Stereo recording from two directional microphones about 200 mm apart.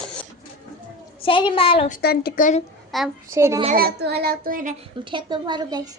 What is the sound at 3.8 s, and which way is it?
Speech, 50° right (ahead or behind).